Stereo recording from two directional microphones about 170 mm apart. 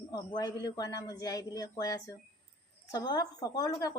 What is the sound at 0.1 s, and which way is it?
Speech, 25° left (ahead or behind).